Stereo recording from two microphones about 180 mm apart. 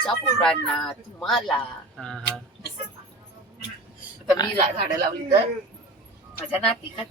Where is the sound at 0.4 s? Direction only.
5° left (ahead or behind).